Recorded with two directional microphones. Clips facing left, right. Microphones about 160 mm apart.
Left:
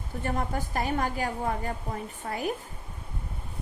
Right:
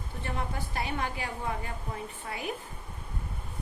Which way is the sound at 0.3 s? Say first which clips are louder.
Left 5 dB; 45° left (ahead or behind).